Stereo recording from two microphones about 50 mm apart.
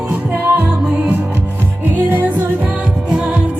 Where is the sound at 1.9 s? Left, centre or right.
Right.